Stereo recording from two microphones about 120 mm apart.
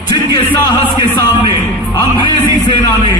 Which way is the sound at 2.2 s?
40° left (ahead or behind).